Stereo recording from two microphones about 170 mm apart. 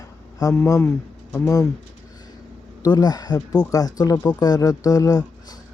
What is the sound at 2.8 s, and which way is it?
Speech, 25° left (ahead or behind).